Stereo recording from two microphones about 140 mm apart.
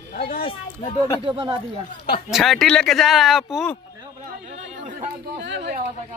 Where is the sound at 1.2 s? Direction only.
35° right (ahead or behind).